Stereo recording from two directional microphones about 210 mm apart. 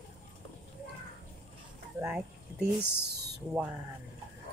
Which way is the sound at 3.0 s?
50° right (ahead or behind).